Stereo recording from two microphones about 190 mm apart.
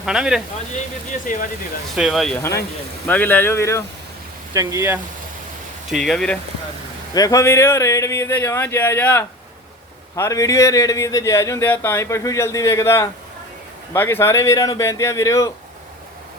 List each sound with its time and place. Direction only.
0.0 s speech: 5° right (ahead or behind)
1.3 s speech: 45° left (ahead or behind)
2.0 s speech: centre (ahead or behind); by 3.8 s 15° left (ahead or behind)
4.5 s speech: 15° right (ahead or behind)
5.9 s speech: centre (ahead or behind)
7.1 s speech: 20° left (ahead or behind)